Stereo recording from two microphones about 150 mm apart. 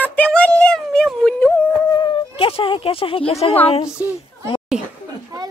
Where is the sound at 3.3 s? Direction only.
45° left (ahead or behind).